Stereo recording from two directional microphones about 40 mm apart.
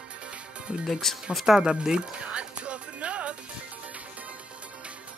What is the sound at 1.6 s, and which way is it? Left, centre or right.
Music, right.